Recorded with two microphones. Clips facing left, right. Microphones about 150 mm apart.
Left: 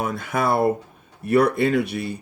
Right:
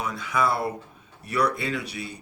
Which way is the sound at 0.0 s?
55° left (ahead or behind).